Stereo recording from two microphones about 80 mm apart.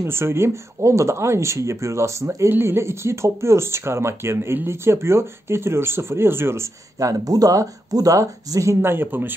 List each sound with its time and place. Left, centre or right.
0.0 s speech: right
8.9 s a man's voice: right